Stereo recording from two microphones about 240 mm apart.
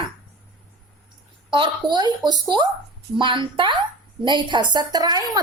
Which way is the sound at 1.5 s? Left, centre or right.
Centre.